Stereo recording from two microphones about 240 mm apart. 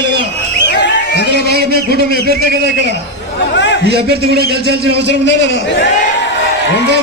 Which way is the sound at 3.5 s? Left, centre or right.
Left.